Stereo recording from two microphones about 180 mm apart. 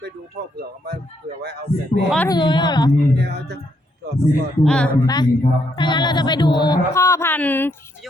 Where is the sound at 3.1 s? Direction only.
65° right (ahead or behind).